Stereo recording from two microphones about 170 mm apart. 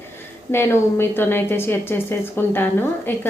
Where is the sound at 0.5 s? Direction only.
15° left (ahead or behind).